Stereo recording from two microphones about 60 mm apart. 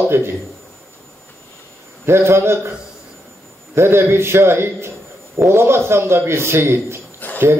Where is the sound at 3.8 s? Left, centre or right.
Right.